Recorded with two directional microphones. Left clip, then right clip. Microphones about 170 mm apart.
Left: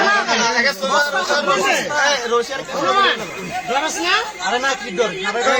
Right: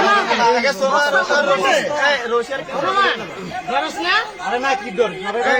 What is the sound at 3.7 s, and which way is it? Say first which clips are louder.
Speech: even; 60° left (ahead or behind).